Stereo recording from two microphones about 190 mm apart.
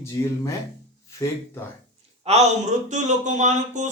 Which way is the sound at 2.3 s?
35° right (ahead or behind).